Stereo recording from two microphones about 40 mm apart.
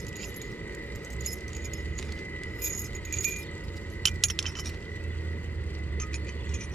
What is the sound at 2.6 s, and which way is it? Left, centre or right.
Keys jangling, centre.